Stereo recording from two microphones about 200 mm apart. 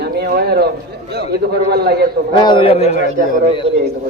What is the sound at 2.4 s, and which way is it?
Speech, 25° left (ahead or behind).